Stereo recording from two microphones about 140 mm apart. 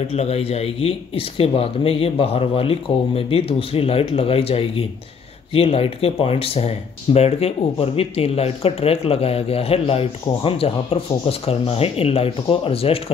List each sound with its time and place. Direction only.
0.1 s speech: 45° left (ahead or behind)